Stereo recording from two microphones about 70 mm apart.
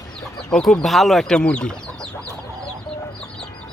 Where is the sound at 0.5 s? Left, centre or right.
Centre.